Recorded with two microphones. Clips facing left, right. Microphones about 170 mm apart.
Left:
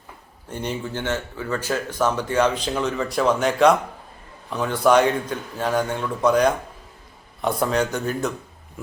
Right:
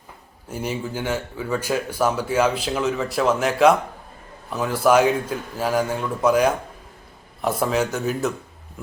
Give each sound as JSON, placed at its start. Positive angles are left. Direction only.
{"t": 0.4, "sound": "a man's voice", "side_deg": -5}